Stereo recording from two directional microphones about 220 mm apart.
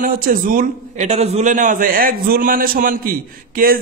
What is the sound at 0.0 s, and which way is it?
Speech, 40° right (ahead or behind).